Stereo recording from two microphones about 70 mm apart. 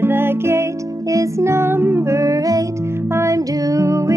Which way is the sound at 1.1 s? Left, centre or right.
Right.